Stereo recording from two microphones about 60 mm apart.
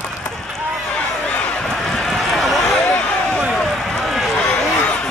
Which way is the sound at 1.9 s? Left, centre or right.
Centre.